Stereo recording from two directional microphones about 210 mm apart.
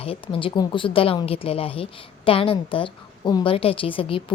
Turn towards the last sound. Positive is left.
turn(degrees=25)  # may be behind; listen again after turning